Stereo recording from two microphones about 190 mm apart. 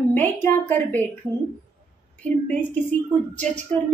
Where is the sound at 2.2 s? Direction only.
5° left (ahead or behind).